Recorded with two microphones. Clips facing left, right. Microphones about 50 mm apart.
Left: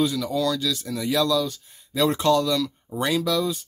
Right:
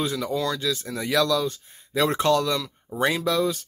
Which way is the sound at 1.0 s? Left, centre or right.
Right.